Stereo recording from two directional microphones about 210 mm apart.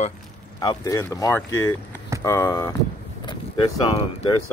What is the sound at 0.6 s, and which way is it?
Speech, 20° left (ahead or behind).